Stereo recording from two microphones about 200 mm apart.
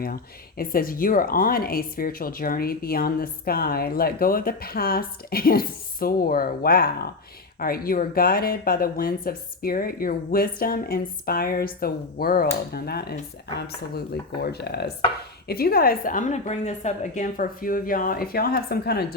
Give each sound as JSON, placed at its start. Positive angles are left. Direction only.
{"t": 0.0, "sound": "speech", "side_deg": 50}